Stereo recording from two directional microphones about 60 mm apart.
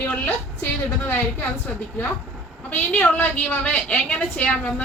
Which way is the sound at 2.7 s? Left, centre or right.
Left.